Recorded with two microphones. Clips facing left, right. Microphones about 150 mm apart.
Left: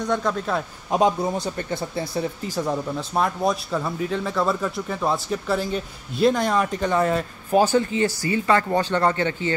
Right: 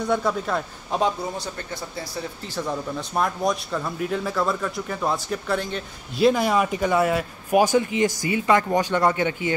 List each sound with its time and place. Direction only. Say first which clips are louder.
0.0 s speech: even; 5° right (ahead or behind)
0.9 s speech: left 4 dB; 15° left (ahead or behind)
1.4 s speech: left 5 dB; 55° left (ahead or behind)
2.5 s speech: left 2 dB; 15° left (ahead or behind)
3.0 s speech: right 1 dB; 5° left (ahead or behind); by 9.5 s 15° right (ahead or behind)